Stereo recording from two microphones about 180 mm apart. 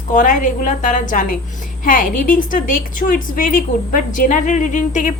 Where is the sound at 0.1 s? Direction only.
45° left (ahead or behind).